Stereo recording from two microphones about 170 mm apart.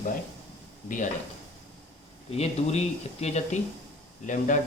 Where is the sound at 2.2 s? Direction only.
40° left (ahead or behind).